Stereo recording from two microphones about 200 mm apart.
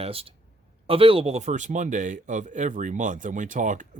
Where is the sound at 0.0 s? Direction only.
30° right (ahead or behind).